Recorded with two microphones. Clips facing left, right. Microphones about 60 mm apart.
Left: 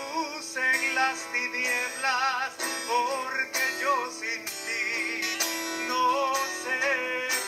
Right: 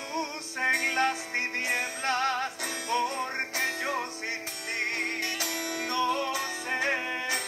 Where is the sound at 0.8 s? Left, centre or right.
Left.